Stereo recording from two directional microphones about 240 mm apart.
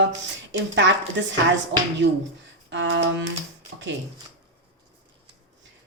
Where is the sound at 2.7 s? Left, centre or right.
Right.